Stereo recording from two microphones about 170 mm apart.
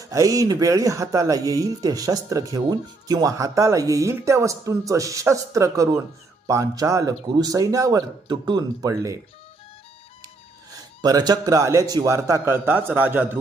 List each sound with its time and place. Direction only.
0.0 s speech: 20° right (ahead or behind)
10.7 s speech: 20° right (ahead or behind)